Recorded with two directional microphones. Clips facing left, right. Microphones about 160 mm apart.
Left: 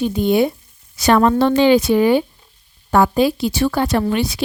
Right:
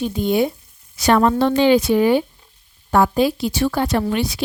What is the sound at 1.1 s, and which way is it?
A woman's voice, 85° left.